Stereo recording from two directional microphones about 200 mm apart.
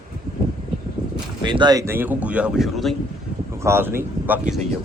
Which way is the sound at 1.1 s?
25° right (ahead or behind).